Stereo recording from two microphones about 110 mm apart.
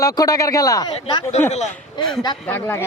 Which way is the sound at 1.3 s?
90° left.